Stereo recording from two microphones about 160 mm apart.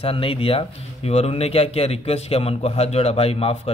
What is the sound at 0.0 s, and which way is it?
Speech, 35° left (ahead or behind).